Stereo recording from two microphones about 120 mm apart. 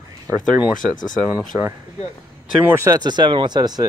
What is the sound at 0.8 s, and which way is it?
Speech, 90° left.